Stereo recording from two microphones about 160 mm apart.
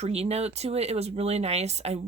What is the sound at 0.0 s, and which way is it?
Speech, 40° right (ahead or behind).